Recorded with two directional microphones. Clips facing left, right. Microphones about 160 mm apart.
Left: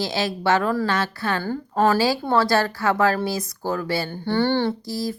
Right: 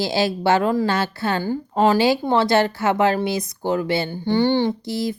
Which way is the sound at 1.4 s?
15° right (ahead or behind).